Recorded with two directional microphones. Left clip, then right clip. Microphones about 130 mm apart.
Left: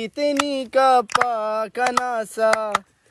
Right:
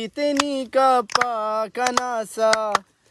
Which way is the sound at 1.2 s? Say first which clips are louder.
Left 1 dB; 20° right (ahead or behind).